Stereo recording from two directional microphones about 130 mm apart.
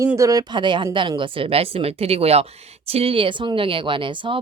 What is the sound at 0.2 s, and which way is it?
A woman's voice, 25° right (ahead or behind).